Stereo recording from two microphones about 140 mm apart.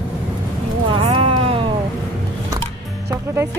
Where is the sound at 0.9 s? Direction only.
40° right (ahead or behind).